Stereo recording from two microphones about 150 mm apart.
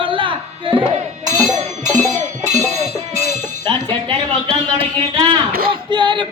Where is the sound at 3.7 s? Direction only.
35° right (ahead or behind).